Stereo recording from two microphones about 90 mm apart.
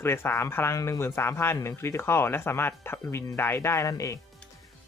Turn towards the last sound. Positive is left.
turn(degrees=40)  # may be behind; listen again after turning